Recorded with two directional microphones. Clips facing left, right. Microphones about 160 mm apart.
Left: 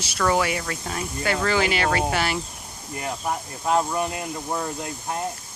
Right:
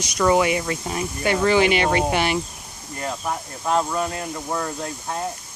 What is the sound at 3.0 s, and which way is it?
Speech, 15° left (ahead or behind).